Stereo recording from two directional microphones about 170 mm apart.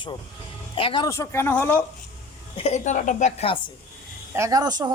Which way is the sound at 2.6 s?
45° left (ahead or behind).